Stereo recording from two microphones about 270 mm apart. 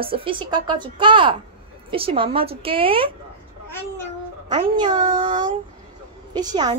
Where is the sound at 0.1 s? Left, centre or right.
Centre.